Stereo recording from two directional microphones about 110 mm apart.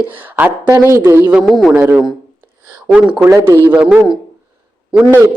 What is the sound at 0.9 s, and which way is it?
Speech, 25° right (ahead or behind).